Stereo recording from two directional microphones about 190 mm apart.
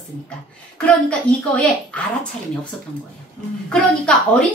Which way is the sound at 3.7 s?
5° left (ahead or behind).